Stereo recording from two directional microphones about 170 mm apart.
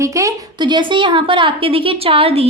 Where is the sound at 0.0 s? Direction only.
20° right (ahead or behind).